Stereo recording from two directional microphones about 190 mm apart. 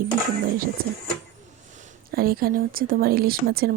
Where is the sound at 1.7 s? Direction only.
40° right (ahead or behind).